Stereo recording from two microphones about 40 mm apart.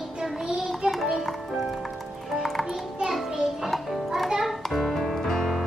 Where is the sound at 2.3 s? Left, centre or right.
Centre.